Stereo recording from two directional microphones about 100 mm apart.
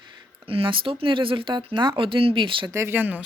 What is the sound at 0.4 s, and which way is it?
Speech, 65° right (ahead or behind).